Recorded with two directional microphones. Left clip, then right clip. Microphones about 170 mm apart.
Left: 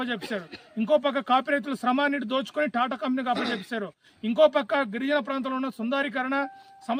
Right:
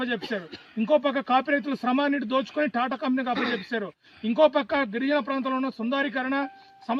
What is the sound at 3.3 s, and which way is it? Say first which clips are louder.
Speech: right 1 dB; 90° left.